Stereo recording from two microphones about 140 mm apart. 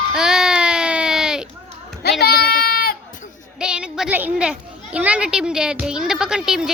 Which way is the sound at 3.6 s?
5° right (ahead or behind).